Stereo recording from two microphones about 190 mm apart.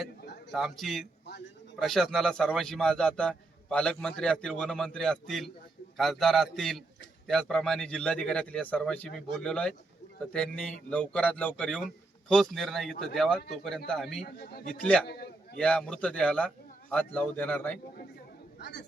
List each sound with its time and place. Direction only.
0.5 s a man's voice: centre (ahead or behind)
14.3 s a man's voice: 55° left (ahead or behind)
15.5 s a man's voice: 5° left (ahead or behind)
18.6 s a man's voice: 65° left (ahead or behind)